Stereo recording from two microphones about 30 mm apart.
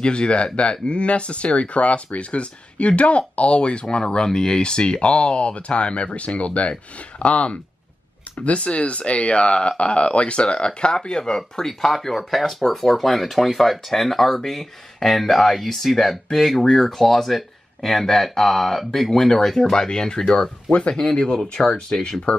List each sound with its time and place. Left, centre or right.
0.0 s speech: left
10.9 s speech: left
12.3 s speech: centre
19.7 s speech: left
21.6 s speech: left
22.3 s speech: left